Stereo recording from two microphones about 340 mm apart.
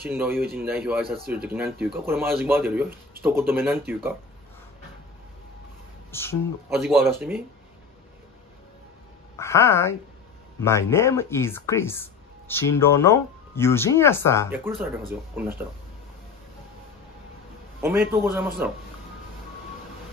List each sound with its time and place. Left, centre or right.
0.1 s speech: centre
0.4 s speech: right
0.7 s speech: centre
6.1 s speech: centre
6.9 s speech: centre
9.4 s speech: centre
14.5 s speech: centre
17.8 s speech: centre